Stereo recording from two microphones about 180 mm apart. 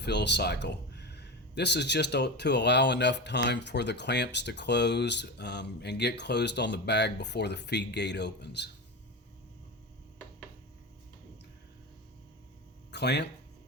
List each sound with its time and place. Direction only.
0.0 s speech: 70° left (ahead or behind)
12.9 s speech: 70° left (ahead or behind)